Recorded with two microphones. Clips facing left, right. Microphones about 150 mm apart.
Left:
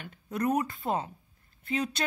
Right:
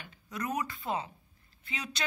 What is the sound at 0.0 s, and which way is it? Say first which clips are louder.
A woman's voice: left 8 dB; 55° left (ahead or behind).